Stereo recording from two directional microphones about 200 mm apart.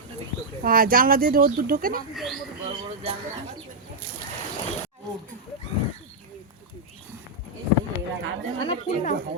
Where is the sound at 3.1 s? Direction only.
30° right (ahead or behind).